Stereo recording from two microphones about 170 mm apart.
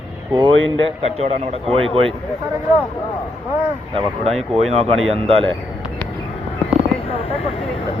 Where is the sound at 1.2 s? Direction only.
35° right (ahead or behind).